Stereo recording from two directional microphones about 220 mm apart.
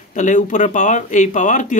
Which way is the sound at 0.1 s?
35° left (ahead or behind).